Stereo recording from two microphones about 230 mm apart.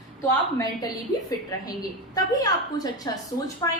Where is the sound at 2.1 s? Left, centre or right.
Centre.